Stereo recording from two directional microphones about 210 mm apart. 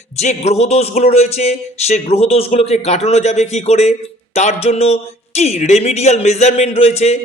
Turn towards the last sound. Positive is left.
turn(degrees=30)  # may be behind; listen again after turning